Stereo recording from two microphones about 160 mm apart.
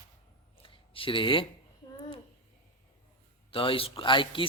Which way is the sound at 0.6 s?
35° left (ahead or behind).